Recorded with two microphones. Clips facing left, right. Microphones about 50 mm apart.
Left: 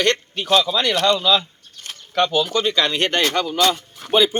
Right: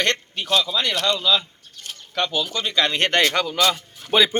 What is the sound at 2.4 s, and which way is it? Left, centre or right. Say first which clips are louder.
Speech: left 6 dB; left.